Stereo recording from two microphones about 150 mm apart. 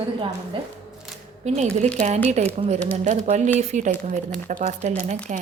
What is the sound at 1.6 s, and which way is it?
A woman's voice, 45° right (ahead or behind).